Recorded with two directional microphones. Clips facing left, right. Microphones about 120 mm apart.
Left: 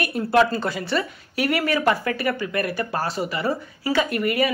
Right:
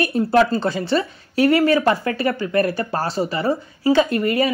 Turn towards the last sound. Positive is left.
turn(degrees=-30)  # may be behind; listen again after turning